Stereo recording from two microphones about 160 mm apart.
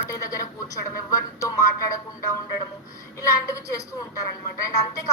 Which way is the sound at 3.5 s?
20° left (ahead or behind).